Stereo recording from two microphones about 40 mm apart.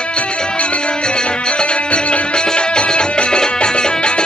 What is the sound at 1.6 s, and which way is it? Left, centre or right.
Music, left.